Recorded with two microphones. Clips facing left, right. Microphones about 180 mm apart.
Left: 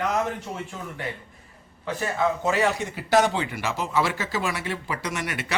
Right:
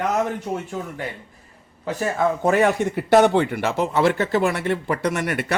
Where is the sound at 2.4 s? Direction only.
55° right (ahead or behind).